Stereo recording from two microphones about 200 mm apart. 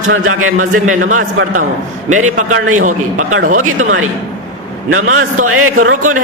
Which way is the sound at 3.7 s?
90° right.